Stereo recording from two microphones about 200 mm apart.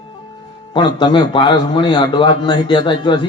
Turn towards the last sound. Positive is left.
turn(degrees=25)  # may be behind; listen again after turning